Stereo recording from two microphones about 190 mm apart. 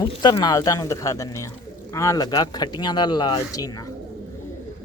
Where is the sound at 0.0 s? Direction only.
25° left (ahead or behind).